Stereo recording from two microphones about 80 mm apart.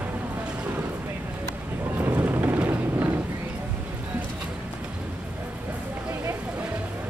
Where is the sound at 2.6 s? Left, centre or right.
Right.